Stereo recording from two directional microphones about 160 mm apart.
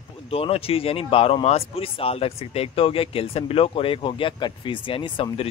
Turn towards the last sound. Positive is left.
turn(degrees=30)  # may be behind; listen again after turning